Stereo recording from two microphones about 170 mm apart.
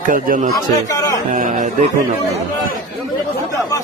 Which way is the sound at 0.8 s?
20° left (ahead or behind).